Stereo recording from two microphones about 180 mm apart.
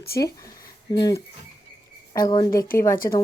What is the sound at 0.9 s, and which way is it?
Speech, 20° left (ahead or behind).